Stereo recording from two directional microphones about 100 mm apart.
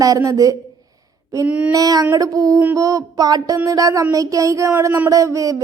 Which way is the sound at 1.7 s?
40° right (ahead or behind).